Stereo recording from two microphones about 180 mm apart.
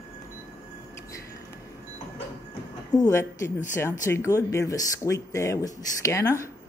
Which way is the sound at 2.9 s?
15° left (ahead or behind).